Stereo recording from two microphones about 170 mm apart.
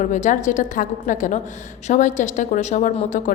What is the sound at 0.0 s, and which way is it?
A woman's voice, 45° left (ahead or behind).